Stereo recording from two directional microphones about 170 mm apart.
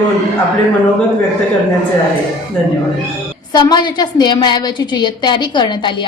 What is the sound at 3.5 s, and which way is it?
A woman's voice, 25° left (ahead or behind).